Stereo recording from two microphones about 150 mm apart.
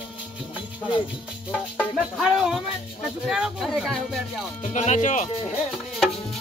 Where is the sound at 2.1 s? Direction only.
Centre (ahead or behind).